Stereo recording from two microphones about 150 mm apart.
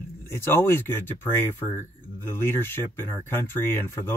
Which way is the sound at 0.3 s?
15° left (ahead or behind).